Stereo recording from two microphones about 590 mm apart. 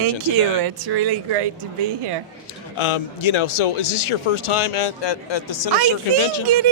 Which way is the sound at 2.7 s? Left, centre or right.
Left.